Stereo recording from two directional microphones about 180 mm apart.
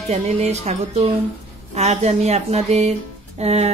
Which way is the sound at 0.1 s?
35° right (ahead or behind).